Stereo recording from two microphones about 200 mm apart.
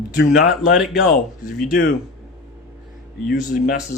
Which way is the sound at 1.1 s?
45° left (ahead or behind).